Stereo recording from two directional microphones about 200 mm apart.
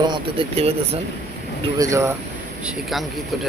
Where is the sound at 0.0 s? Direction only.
25° right (ahead or behind).